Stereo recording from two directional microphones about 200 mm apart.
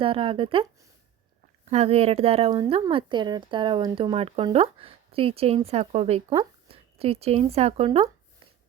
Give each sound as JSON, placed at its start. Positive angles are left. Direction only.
{"t": 0.0, "sound": "speech", "side_deg": -25}
{"t": 1.7, "sound": "speech", "side_deg": -30}